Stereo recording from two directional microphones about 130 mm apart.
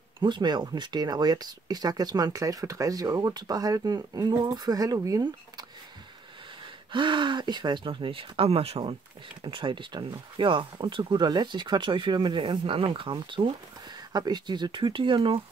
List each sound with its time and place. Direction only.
0.2 s speech: 35° right (ahead or behind)
6.9 s speech: 40° right (ahead or behind)